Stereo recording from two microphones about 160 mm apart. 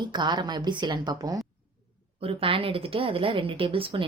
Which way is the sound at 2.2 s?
35° right (ahead or behind).